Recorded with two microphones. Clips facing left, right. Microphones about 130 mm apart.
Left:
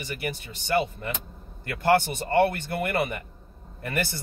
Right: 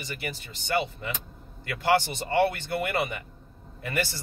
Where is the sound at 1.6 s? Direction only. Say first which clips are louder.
Left 2 dB; 50° left (ahead or behind).